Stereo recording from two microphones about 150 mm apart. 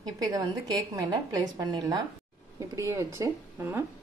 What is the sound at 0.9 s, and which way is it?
A woman's voice, 25° right (ahead or behind).